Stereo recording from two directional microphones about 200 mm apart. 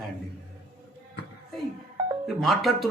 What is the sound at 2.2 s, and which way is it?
Speech, centre (ahead or behind).